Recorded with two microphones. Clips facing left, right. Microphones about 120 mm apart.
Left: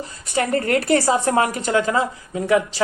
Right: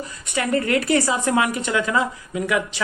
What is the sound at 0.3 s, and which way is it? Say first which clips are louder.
Speech: left 1 dB; 40° left (ahead or behind).